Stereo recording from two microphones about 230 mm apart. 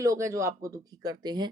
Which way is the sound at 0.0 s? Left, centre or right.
Centre.